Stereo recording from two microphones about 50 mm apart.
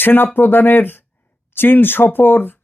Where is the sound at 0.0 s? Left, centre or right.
Left.